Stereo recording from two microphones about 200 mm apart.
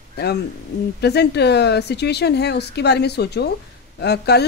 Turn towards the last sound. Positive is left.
turn(degrees=55)  # may be behind; listen again after turning